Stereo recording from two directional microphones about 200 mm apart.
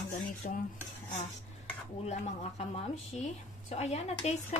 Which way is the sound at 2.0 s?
35° left (ahead or behind).